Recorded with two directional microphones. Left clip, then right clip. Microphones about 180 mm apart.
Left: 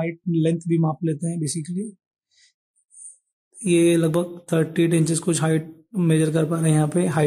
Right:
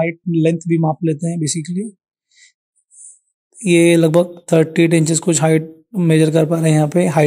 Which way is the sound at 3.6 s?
40° right (ahead or behind).